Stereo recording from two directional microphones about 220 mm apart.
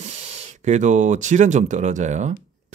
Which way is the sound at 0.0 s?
30° right (ahead or behind).